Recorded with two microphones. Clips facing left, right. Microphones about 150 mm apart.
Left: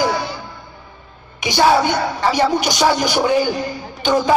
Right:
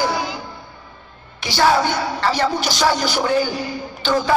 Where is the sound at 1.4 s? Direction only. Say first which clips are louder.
Left 2 dB; 15° left (ahead or behind).